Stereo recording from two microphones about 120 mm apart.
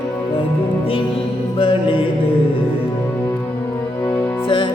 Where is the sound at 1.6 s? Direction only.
50° left (ahead or behind).